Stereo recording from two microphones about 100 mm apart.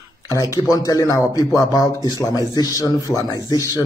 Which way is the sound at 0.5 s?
35° left (ahead or behind).